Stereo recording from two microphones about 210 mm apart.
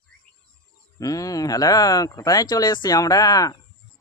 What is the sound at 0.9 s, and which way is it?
A man's voice, 15° left (ahead or behind).